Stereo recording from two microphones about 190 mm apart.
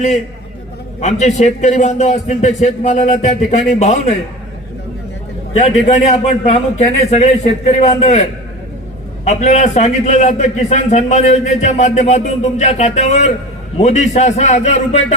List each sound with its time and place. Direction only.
1.0 s a man's voice: 35° left (ahead or behind)
5.5 s a man's voice: 35° left (ahead or behind)